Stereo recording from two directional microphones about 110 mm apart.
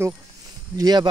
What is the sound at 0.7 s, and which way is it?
Speech, 40° right (ahead or behind).